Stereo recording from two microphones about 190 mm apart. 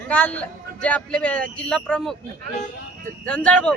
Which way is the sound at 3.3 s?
5° left (ahead or behind).